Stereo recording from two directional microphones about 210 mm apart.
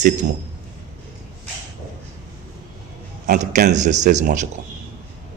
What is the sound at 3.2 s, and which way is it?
Speech, 35° right (ahead or behind).